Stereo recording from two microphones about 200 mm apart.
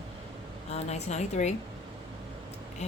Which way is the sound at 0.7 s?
35° left (ahead or behind).